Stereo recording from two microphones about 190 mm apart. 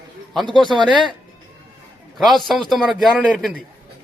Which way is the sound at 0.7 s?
25° right (ahead or behind).